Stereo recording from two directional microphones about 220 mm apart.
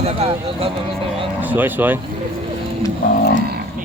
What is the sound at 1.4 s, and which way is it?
Speech, 10° right (ahead or behind).